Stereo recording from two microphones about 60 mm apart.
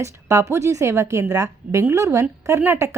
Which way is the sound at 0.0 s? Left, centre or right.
Right.